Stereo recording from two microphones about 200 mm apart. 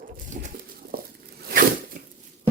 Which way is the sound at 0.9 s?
45° right (ahead or behind).